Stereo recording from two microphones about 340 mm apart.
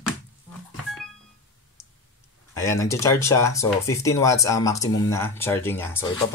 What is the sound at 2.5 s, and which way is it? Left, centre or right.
Speech, centre.